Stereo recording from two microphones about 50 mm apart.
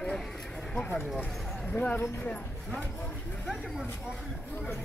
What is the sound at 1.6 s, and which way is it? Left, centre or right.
Speech, left.